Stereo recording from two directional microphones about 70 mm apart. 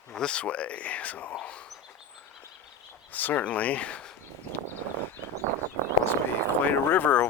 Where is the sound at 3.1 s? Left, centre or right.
Left.